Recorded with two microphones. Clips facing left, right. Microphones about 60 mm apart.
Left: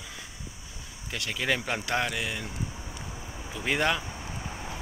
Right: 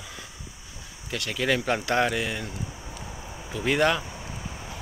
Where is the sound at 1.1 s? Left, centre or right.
Centre.